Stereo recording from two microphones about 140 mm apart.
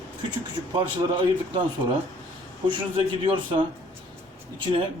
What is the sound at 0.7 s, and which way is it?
Speech, 35° right (ahead or behind).